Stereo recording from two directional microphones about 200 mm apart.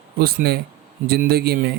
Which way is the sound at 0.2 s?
50° right (ahead or behind).